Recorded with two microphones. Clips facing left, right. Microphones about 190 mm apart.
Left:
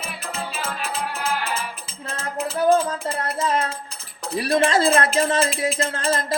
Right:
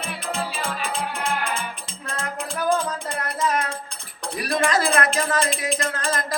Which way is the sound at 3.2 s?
30° left (ahead or behind).